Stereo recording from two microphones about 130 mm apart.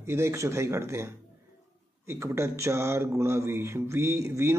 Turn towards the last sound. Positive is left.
turn(degrees=-20)  # may be behind; listen again after turning